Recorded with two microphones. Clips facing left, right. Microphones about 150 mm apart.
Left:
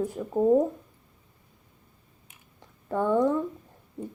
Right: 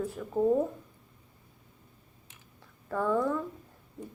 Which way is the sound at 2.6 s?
25° left (ahead or behind).